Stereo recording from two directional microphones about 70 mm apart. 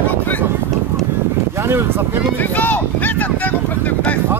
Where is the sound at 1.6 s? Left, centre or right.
Right.